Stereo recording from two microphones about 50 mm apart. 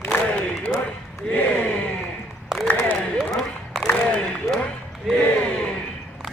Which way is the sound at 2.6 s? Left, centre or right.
Left.